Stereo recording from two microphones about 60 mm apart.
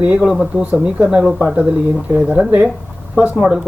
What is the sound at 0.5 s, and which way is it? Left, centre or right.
Speech, right.